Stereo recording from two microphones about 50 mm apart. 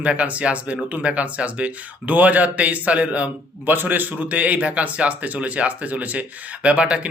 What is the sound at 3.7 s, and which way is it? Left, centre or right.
A man's voice, right.